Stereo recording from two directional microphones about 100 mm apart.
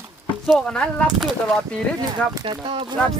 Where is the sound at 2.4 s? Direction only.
55° right (ahead or behind).